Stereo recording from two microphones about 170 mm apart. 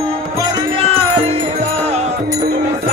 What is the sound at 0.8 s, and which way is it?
Music, 35° right (ahead or behind).